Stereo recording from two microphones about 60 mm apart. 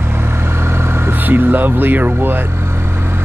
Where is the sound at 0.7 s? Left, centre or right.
Right.